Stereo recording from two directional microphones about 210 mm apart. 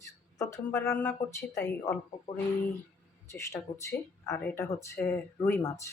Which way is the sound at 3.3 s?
15° left (ahead or behind).